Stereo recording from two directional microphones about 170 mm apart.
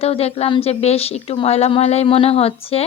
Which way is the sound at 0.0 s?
35° left (ahead or behind).